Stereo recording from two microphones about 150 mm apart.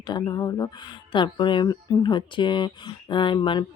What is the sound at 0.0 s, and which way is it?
Speech, 30° left (ahead or behind).